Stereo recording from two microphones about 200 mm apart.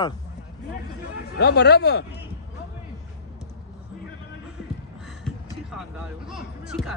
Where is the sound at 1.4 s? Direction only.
55° left (ahead or behind).